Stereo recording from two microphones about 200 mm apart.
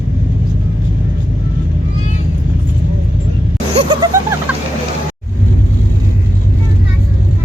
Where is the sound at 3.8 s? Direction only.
25° right (ahead or behind).